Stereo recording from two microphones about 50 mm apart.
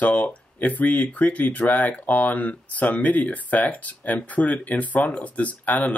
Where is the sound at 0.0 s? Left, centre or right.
Left.